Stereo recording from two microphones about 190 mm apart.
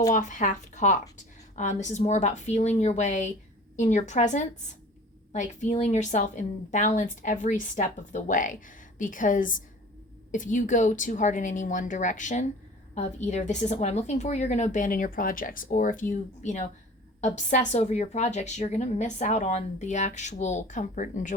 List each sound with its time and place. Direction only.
0.1 s a woman's voice: 40° left (ahead or behind)